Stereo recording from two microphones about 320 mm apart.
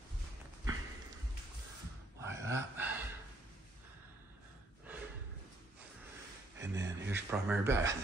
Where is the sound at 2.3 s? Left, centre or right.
Centre.